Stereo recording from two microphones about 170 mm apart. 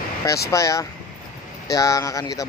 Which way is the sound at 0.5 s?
20° left (ahead or behind).